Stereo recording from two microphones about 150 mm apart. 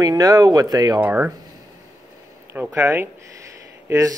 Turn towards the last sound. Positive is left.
turn(degrees=-20)  # may be behind; listen again after turning